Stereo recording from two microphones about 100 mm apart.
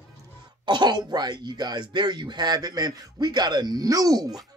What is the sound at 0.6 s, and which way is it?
Speech, 50° right (ahead or behind).